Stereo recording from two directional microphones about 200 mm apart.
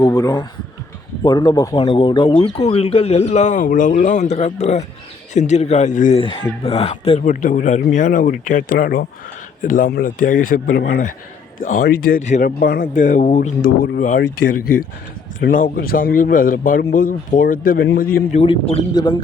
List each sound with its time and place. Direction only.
0.0 s a man's voice: 20° left (ahead or behind); by 13.7 s 40° left (ahead or behind)
15.4 s a man's voice: 45° left (ahead or behind)
18.3 s speech: 30° left (ahead or behind)